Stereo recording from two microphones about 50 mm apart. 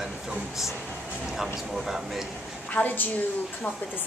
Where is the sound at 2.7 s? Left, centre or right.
Left.